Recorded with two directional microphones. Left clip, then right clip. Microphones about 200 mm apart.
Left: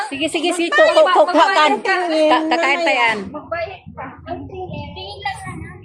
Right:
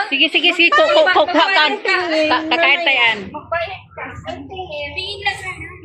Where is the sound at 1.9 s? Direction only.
65° left (ahead or behind).